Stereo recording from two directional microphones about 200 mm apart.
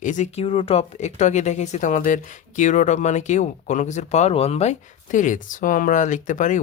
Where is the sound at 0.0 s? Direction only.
35° left (ahead or behind).